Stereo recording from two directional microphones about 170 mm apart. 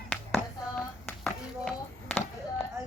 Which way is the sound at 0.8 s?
5° left (ahead or behind).